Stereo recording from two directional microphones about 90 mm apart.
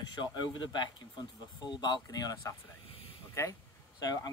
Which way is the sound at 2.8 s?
90° left.